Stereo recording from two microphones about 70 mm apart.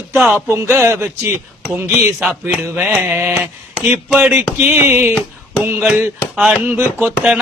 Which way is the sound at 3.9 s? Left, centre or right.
Centre.